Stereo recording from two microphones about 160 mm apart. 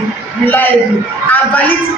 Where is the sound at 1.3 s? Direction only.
10° left (ahead or behind).